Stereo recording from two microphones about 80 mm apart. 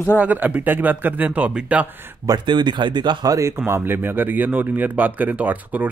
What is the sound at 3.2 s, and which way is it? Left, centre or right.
Speech, right.